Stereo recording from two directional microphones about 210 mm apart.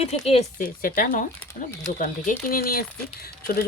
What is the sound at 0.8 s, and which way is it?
Speech, 40° left (ahead or behind).